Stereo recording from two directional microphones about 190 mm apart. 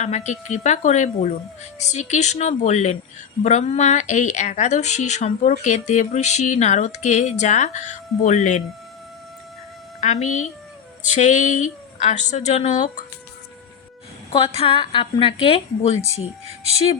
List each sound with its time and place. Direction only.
0.0 s speech: 35° left (ahead or behind)
10.0 s speech: 40° left (ahead or behind)
14.3 s a woman's voice: 30° left (ahead or behind)